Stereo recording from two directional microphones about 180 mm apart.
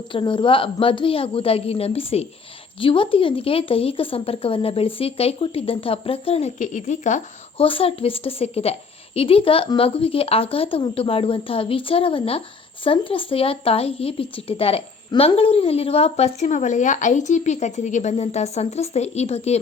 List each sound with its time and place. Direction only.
0.1 s speech: 30° left (ahead or behind); by 7.2 s 45° left (ahead or behind)
7.6 s speech: 30° left (ahead or behind)